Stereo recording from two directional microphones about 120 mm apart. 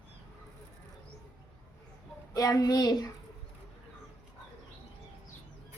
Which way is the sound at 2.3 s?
30° left (ahead or behind).